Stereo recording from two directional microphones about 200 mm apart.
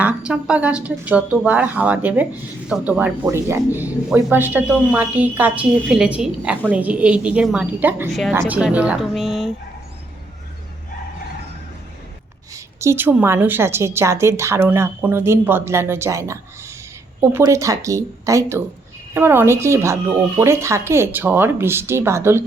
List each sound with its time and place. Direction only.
0.3 s a woman's voice: 5° right (ahead or behind)
8.1 s speech: centre (ahead or behind)
12.5 s a woman's voice: 15° right (ahead or behind)